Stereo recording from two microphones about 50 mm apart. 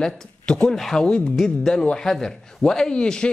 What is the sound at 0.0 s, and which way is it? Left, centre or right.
Speech, centre.